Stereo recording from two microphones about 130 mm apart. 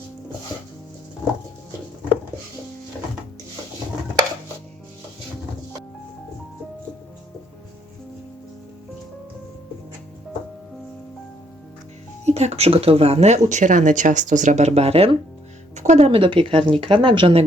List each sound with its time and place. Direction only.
12.2 s speech: 55° right (ahead or behind)
15.7 s speech: 60° right (ahead or behind); by 17.4 s 40° right (ahead or behind)